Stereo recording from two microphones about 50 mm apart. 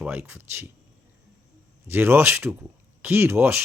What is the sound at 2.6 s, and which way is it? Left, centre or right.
Speech, right.